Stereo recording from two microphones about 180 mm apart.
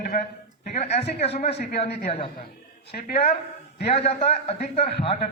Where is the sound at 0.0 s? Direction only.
55° left (ahead or behind).